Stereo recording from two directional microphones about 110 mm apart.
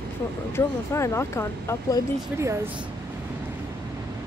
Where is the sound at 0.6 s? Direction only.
25° left (ahead or behind).